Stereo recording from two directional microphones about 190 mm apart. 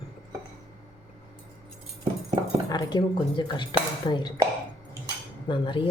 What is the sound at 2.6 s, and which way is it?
Speech, 20° left (ahead or behind).